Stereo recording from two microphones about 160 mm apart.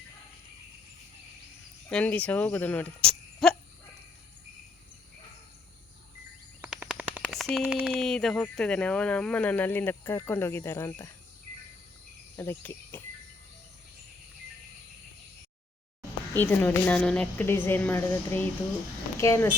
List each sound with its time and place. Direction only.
1.9 s speech: 5° left (ahead or behind)
6.6 s a sound: 10° right (ahead or behind)
7.6 s speech: 10° right (ahead or behind); by 11.1 s 20° left (ahead or behind)
12.4 s speech: 15° left (ahead or behind)
16.4 s speech: 10° left (ahead or behind)